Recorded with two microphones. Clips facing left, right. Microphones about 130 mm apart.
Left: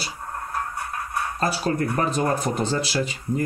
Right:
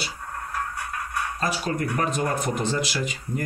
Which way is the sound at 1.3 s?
35° left (ahead or behind).